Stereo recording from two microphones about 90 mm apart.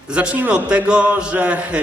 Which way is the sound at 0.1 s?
15° right (ahead or behind).